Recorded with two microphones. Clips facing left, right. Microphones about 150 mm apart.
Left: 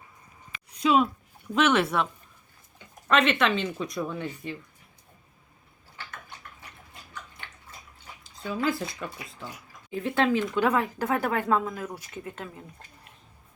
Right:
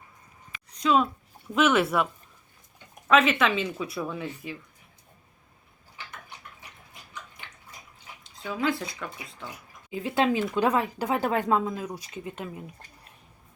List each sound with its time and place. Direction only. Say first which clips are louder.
0.7 s a sound: left 1 dB; 5° left (ahead or behind)
1.5 s speech: right 1 dB; centre (ahead or behind)
3.1 s speech: right 1 dB; centre (ahead or behind)
8.2 s drip: even; centre (ahead or behind)
9.9 s speech: even; 15° right (ahead or behind)